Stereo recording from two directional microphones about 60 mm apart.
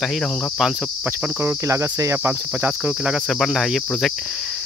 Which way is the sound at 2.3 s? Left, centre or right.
Right.